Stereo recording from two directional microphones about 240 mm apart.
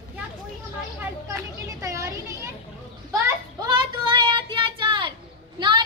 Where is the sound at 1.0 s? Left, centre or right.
Centre.